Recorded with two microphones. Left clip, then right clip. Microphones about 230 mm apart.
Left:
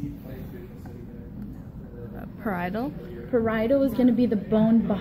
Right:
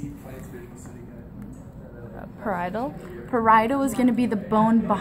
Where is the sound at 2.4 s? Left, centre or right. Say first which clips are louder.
Right 2 dB; centre.